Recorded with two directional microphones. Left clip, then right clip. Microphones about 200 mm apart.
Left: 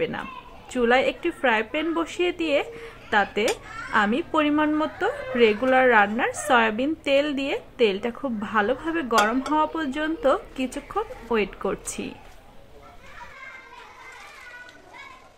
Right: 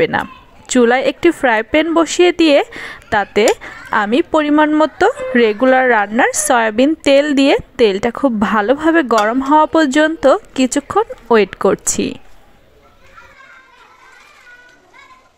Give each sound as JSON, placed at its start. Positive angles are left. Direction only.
{"t": 0.0, "sound": "a woman's voice", "side_deg": -40}